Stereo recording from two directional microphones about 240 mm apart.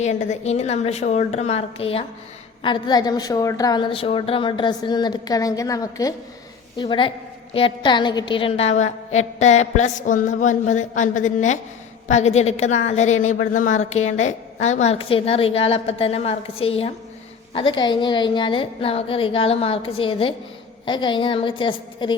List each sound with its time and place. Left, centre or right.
0.0 s a woman's voice: left